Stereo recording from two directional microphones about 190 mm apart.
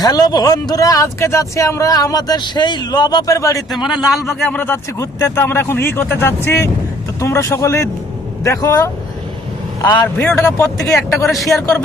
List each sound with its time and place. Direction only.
0.0 s speech: 20° left (ahead or behind)
3.8 s a man's voice: centre (ahead or behind); by 10.1 s 20° left (ahead or behind)
10.2 s speech: 5° left (ahead or behind)